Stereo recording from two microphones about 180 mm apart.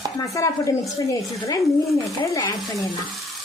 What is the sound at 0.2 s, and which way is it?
Speech, 20° left (ahead or behind).